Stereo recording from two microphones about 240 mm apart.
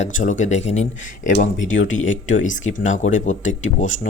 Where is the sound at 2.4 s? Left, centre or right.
Left.